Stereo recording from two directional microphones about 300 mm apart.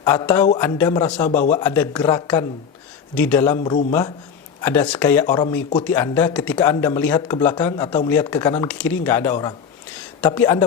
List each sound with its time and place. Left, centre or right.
0.0 s speech: centre
3.6 s a man's voice: left
4.6 s speech: centre